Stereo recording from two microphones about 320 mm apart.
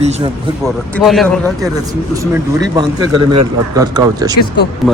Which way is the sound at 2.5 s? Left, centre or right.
Centre.